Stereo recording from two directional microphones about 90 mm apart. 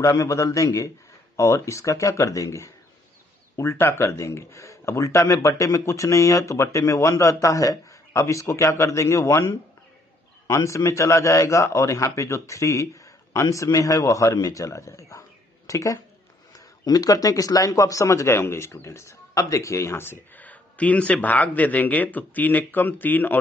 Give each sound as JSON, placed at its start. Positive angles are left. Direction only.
{"t": 0.0, "sound": "speech", "side_deg": 35}